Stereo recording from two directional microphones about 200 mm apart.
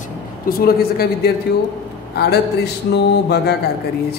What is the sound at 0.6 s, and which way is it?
Speech, 50° left (ahead or behind).